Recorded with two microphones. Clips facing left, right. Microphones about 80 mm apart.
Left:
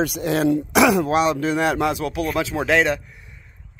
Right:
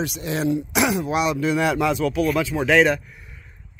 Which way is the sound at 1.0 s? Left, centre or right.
Left.